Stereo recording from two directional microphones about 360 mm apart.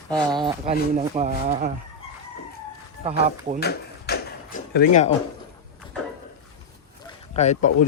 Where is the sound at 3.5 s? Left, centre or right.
Left.